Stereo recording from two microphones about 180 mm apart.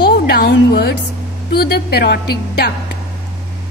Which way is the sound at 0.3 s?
65° left (ahead or behind).